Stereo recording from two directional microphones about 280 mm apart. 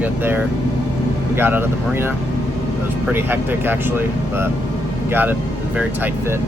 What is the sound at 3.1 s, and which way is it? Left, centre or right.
Speech, centre.